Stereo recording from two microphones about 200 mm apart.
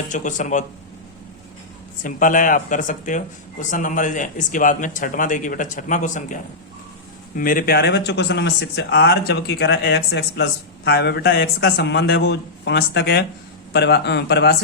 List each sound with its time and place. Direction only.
0.1 s speech: 40° left (ahead or behind)
2.0 s speech: 40° left (ahead or behind)